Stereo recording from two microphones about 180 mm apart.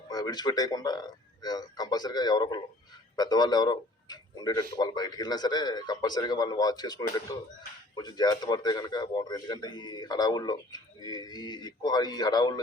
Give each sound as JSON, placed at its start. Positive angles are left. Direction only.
{"t": 0.1, "sound": "speech", "side_deg": 20}